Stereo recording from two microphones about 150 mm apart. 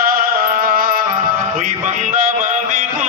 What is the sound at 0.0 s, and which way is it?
Music, 70° right (ahead or behind).